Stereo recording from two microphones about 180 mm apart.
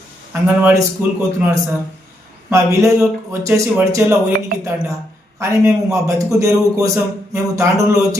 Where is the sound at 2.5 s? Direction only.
15° right (ahead or behind).